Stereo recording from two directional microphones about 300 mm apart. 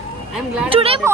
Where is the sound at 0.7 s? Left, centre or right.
Centre.